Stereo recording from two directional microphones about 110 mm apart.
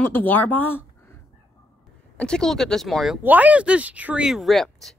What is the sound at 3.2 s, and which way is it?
Speech, 15° right (ahead or behind).